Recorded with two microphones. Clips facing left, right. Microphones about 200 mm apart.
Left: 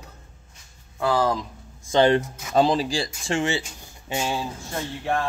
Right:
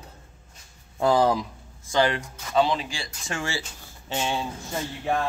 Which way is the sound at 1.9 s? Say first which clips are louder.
Left 5 dB; 25° left (ahead or behind).